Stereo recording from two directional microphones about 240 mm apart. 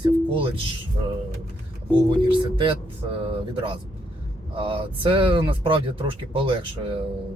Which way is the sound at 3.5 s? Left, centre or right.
Right.